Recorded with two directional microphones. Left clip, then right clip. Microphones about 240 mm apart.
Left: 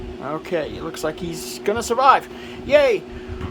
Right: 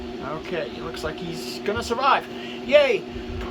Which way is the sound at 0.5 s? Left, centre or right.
Left.